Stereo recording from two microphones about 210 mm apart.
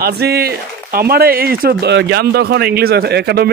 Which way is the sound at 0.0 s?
50° right (ahead or behind).